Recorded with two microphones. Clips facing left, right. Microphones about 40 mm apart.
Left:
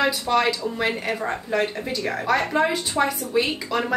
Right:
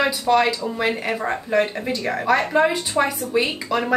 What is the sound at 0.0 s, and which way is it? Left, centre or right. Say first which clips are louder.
A woman's voice: right 2 dB; centre.